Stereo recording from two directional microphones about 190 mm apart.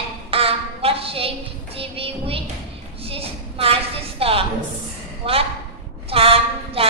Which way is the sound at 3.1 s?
30° right (ahead or behind).